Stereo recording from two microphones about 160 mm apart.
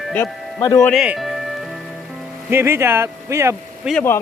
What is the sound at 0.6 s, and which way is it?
Speech, 20° left (ahead or behind).